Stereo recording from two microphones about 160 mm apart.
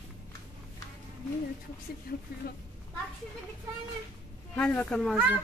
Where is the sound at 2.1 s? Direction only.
65° left (ahead or behind).